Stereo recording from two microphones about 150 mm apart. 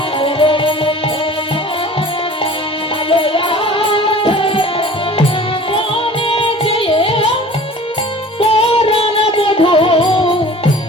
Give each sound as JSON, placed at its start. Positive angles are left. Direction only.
{"t": 0.2, "sound": "music", "side_deg": 35}
{"t": 3.1, "sound": "music", "side_deg": 35}
{"t": 8.4, "sound": "music", "side_deg": 40}